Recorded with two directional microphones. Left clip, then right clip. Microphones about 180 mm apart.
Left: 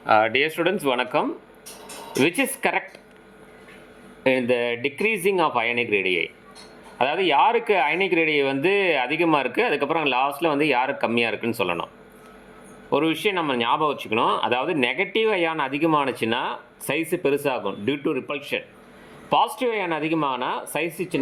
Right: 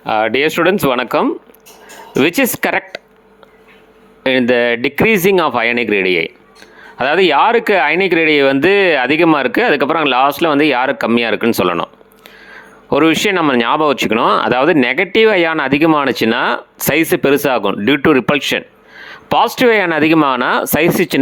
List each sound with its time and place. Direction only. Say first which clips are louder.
0.0 s speech: right 5 dB; 30° right (ahead or behind)
4.2 s speech: right 8 dB; 35° right (ahead or behind)
12.9 s speech: right 10 dB; 45° right (ahead or behind)